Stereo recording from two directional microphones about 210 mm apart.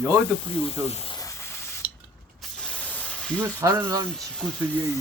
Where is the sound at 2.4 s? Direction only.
5° left (ahead or behind).